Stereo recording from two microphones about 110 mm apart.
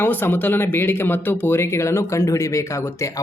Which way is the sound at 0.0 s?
20° left (ahead or behind).